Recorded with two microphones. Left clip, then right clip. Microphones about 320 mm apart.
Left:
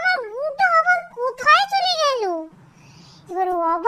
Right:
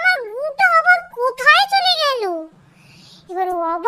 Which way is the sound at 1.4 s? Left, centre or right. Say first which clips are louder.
Right 3 dB; centre.